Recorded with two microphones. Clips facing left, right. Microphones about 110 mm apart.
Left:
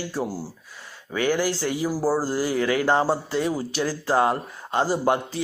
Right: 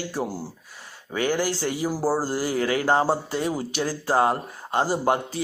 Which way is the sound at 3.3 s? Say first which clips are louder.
Left 2 dB; 50° right (ahead or behind).